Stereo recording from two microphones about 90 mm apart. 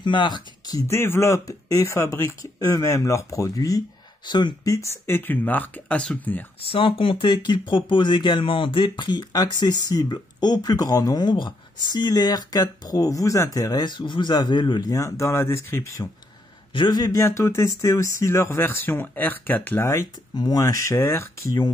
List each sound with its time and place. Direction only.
0.0 s speech: 60° left (ahead or behind)
0.7 s speech: 30° left (ahead or behind)
4.3 s speech: 55° left (ahead or behind)
4.6 s speech: 35° left (ahead or behind)
5.1 s speech: 20° left (ahead or behind)
6.7 s speech: 85° left; by 13.8 s 40° left (ahead or behind)
13.8 s speech: 60° left (ahead or behind); by 16.1 s 35° left (ahead or behind)
16.7 s speech: 50° left (ahead or behind)
17.2 s speech: 35° left (ahead or behind)
20.3 s speech: 45° left (ahead or behind)